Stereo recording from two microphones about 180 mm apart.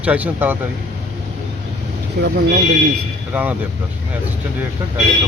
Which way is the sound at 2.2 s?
65° right (ahead or behind).